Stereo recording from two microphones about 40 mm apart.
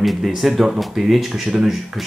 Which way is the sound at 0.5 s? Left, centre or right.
Centre.